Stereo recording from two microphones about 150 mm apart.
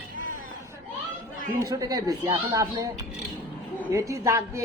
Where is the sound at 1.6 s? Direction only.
25° right (ahead or behind).